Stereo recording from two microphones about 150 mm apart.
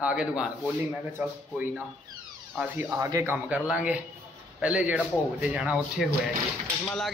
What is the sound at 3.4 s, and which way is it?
Speech, 5° right (ahead or behind).